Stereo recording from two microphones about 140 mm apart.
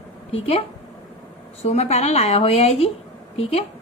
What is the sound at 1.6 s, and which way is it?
A woman's voice, 50° left (ahead or behind).